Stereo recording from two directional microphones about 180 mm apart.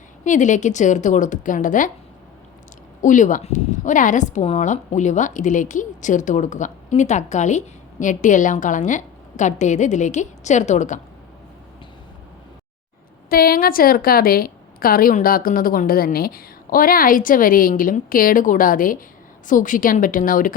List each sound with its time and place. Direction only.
0.3 s speech: 45° left (ahead or behind)
3.0 s speech: 45° left (ahead or behind)
13.3 s speech: 55° left (ahead or behind)